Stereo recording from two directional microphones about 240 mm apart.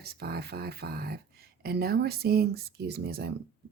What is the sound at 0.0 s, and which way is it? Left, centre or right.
Speech, right.